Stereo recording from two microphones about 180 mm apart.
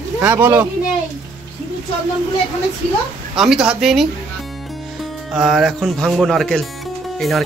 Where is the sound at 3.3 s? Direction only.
5° right (ahead or behind).